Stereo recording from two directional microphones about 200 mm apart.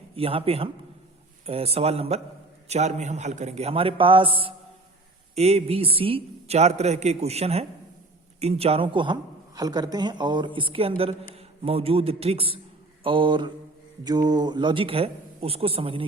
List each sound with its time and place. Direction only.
0.2 s a man's voice: 30° right (ahead or behind)